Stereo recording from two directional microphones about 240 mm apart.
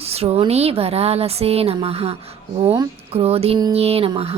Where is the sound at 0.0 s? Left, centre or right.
Right.